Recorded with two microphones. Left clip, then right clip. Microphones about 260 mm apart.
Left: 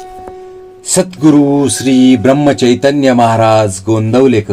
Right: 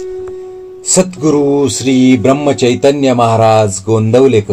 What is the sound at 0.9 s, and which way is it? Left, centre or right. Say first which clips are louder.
Mantra: left 2 dB; left.